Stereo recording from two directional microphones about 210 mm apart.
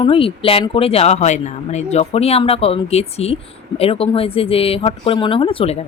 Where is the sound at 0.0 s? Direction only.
25° left (ahead or behind).